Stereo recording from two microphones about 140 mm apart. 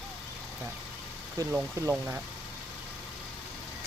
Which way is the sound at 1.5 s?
15° right (ahead or behind).